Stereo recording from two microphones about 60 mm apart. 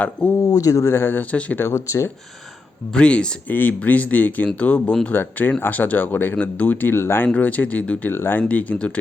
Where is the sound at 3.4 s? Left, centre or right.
Left.